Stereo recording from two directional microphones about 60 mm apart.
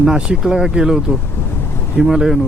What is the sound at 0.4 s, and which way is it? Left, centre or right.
Speech, centre.